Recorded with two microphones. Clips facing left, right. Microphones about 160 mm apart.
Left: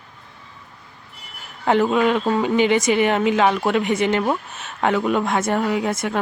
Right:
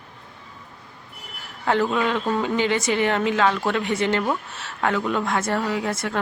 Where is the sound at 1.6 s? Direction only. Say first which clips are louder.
Left 4 dB; 20° left (ahead or behind).